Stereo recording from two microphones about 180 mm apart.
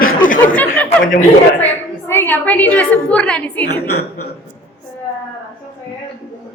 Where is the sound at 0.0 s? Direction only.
50° left (ahead or behind).